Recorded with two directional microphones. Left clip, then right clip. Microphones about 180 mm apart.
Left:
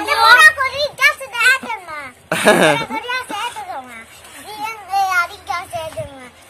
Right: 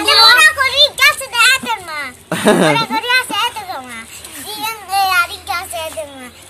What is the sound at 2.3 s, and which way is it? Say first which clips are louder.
Speech: even; 15° left (ahead or behind).